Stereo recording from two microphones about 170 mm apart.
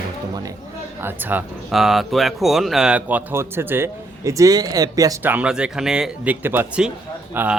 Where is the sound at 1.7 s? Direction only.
Centre (ahead or behind).